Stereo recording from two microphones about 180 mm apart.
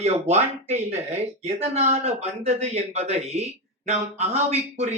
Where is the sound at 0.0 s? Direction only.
35° right (ahead or behind).